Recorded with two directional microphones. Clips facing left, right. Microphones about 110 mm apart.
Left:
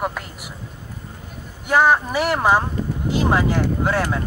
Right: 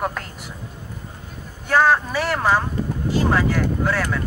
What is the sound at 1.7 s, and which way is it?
Speech, 15° left (ahead or behind).